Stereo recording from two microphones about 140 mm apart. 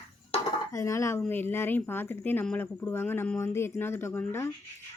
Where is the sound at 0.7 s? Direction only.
25° left (ahead or behind).